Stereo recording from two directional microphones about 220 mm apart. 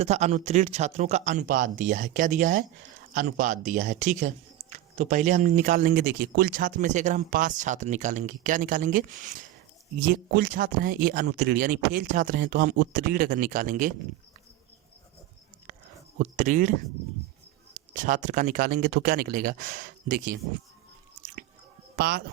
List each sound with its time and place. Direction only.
0.0 s speech: 30° right (ahead or behind)
16.3 s speech: 35° right (ahead or behind)
17.9 s speech: 35° right (ahead or behind)
21.9 s speech: 45° right (ahead or behind)